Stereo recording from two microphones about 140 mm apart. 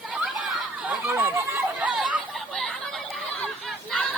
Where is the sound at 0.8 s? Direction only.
15° right (ahead or behind).